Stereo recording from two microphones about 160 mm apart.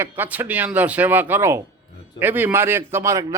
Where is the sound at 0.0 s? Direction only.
10° right (ahead or behind).